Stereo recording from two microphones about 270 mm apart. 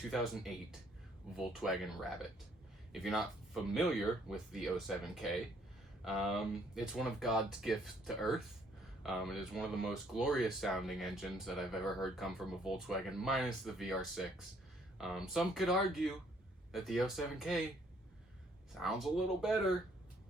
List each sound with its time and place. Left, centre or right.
0.1 s speech: centre
18.7 s speech: centre